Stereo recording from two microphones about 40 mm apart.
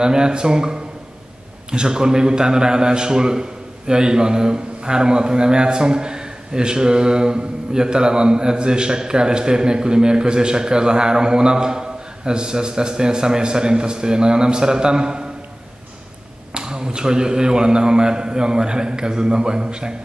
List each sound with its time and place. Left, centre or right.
0.0 s a man's voice: centre
16.5 s a man's voice: centre